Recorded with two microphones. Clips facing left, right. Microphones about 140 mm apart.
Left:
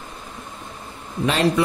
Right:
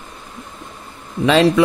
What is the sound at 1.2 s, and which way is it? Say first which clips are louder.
Speech: right 7 dB; 90° right.